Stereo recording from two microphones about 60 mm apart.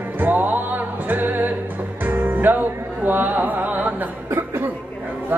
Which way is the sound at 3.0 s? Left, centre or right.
Right.